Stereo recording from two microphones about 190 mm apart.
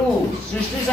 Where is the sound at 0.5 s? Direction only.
5° left (ahead or behind).